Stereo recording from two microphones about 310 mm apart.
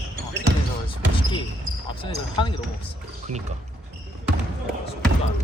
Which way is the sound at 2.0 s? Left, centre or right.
Centre.